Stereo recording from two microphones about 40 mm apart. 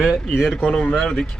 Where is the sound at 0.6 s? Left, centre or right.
Left.